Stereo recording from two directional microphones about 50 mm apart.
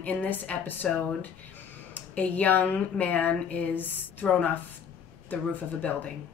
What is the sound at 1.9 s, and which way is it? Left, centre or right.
Speech, left.